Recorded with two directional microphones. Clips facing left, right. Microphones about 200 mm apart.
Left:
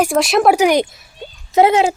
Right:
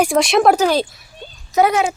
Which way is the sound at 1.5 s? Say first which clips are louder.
Left 3 dB; 25° left (ahead or behind).